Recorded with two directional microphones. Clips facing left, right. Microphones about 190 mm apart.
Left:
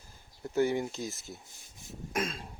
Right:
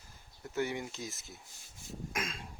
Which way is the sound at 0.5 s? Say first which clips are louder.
Left 7 dB; 40° left (ahead or behind).